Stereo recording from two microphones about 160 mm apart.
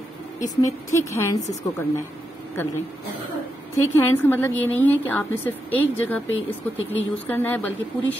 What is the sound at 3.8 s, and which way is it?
A woman's voice, 15° left (ahead or behind).